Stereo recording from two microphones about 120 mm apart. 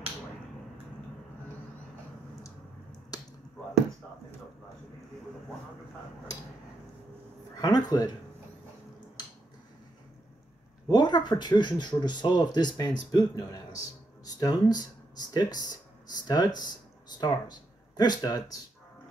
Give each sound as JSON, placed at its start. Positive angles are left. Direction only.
{"t": 3.1, "sound": "finger snapping", "side_deg": 30}
{"t": 7.5, "sound": "speech", "side_deg": 35}
{"t": 10.9, "sound": "speech", "side_deg": 35}